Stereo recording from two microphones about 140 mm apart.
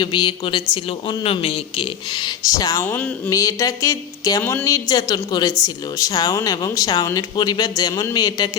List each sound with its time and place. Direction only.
0.0 s speech: 30° left (ahead or behind)
2.1 s speech: 30° left (ahead or behind)
2.8 s speech: 15° left (ahead or behind)